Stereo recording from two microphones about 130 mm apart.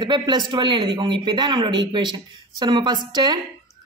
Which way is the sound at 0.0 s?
35° right (ahead or behind).